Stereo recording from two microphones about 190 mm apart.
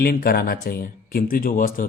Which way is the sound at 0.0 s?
50° left (ahead or behind).